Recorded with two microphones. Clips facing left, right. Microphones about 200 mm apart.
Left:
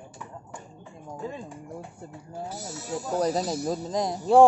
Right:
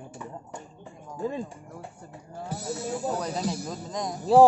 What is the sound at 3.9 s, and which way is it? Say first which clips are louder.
Speech: left 2 dB; 30° left (ahead or behind).